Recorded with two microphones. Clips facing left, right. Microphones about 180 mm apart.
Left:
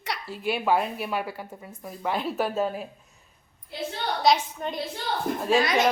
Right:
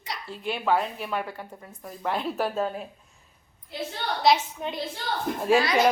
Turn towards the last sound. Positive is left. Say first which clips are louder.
# even
turn(degrees=20)  # may be behind; listen again after turning